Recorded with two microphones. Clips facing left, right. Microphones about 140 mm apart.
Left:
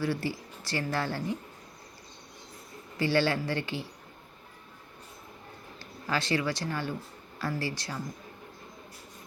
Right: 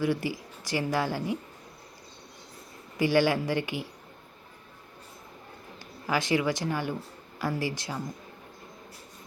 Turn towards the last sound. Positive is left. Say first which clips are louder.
# right 3 dB
turn(degrees=-20)  # may be behind; listen again after turning